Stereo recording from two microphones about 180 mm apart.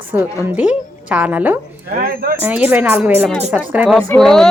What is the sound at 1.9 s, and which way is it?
Speech, 55° right (ahead or behind).